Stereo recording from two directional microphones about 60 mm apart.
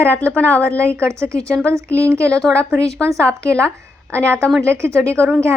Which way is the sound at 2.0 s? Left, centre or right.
Right.